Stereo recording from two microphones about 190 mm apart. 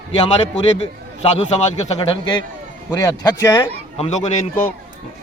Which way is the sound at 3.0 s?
15° left (ahead or behind).